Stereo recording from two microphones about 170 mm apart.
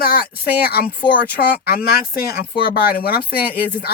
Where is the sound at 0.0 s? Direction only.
65° left (ahead or behind).